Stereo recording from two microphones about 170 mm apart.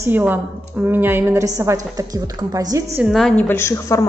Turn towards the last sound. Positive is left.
turn(degrees=20)  # may be behind; listen again after turning